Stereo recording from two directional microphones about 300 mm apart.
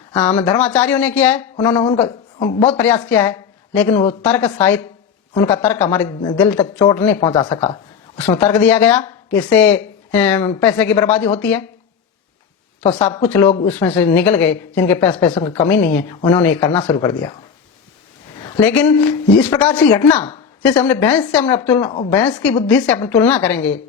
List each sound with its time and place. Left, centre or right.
0.6 s speech: centre
2.8 s a woman's voice: centre
7.2 s speech: centre
8.2 s a woman's voice: centre
12.9 s speech: centre
13.2 s a woman's voice: centre
18.4 s a woman's voice: centre
21.8 s speech: centre
22.6 s a woman's voice: centre